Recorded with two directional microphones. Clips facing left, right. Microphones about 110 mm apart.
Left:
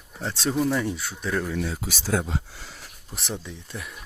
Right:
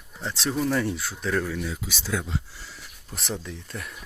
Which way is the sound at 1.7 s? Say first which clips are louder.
Left 4 dB; 45° left (ahead or behind).